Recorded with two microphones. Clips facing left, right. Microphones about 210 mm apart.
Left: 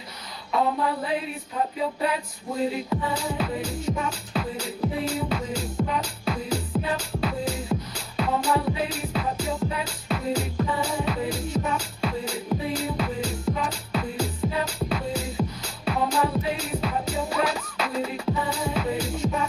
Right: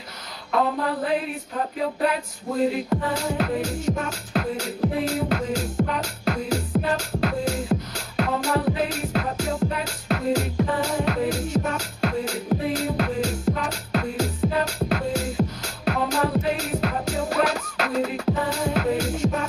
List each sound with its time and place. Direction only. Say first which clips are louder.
0.5 s music: right 1 dB; 65° right (ahead or behind)
9.6 s music: right 3 dB; 60° right (ahead or behind)